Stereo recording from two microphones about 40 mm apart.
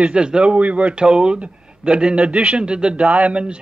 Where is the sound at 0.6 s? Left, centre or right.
Right.